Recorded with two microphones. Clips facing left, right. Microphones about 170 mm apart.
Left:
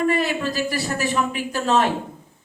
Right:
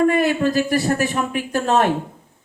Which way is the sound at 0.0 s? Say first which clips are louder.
Right 5 dB; 50° right (ahead or behind).